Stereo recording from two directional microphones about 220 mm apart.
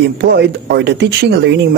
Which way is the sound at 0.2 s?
50° right (ahead or behind).